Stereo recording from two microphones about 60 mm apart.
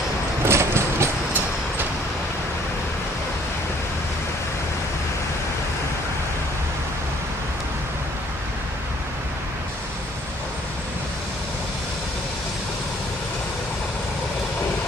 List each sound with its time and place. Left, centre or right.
0.5 s vehicle: right